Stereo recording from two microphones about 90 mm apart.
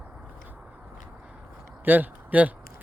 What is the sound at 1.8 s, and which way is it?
Speech, 20° right (ahead or behind).